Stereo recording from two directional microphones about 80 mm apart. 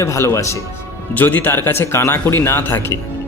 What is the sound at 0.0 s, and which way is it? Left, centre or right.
Speech, left.